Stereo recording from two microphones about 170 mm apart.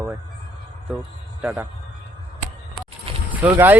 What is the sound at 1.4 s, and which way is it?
Speech, 10° right (ahead or behind).